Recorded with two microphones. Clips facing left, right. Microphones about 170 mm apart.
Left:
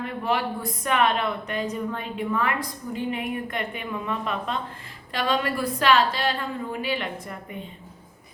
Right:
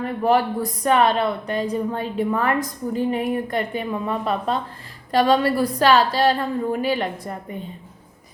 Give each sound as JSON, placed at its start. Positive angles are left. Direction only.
{"t": 0.0, "sound": "a woman's voice", "side_deg": -45}